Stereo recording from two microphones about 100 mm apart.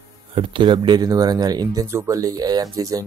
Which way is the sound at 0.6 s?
50° right (ahead or behind).